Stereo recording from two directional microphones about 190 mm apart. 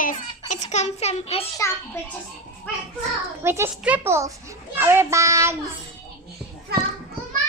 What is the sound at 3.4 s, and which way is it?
A child's voice, 15° right (ahead or behind).